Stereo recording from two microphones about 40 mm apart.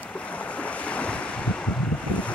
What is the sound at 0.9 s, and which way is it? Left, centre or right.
Waves, left.